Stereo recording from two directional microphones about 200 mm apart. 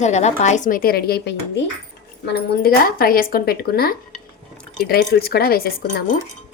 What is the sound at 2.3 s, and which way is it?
Speech, 45° left (ahead or behind).